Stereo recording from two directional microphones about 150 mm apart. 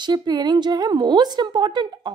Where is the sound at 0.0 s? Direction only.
30° right (ahead or behind).